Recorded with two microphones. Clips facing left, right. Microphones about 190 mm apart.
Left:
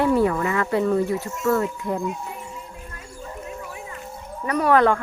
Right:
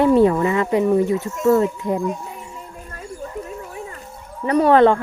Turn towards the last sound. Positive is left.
turn(degrees=-25)  # may be behind; listen again after turning